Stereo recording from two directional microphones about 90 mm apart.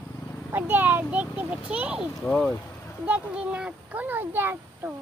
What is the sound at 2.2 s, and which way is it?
Speech, 5° left (ahead or behind).